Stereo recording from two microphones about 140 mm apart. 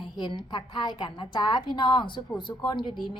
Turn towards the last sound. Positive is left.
turn(degrees=35)  # may be behind; listen again after turning